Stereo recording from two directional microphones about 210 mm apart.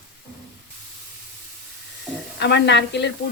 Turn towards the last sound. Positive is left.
turn(degrees=55)  # may be behind; listen again after turning